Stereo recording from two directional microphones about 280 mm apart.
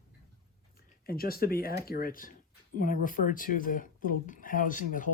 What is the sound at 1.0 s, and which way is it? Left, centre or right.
Speech, left.